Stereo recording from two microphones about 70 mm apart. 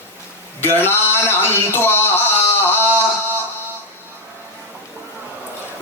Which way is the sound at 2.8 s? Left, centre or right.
Right.